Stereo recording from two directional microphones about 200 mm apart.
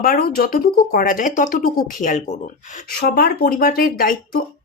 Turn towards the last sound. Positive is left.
turn(degrees=45)  # may be behind; listen again after turning